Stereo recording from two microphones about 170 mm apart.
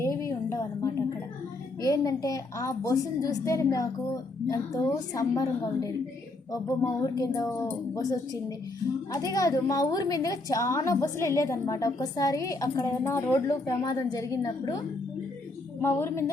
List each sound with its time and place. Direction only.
0.0 s a sound: 20° left (ahead or behind)
1.8 s a woman's voice: 20° left (ahead or behind)
15.8 s a woman's voice: 15° left (ahead or behind)